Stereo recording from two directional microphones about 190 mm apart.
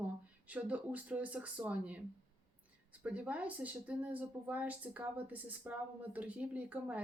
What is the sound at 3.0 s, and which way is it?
Speech, 5° right (ahead or behind).